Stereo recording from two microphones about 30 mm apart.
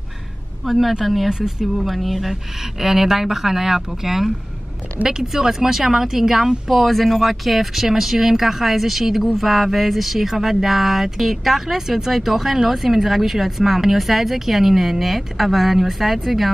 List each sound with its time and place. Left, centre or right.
0.7 s speech: centre
1.3 s speech: right
1.8 s speech: centre
6.7 s speech: centre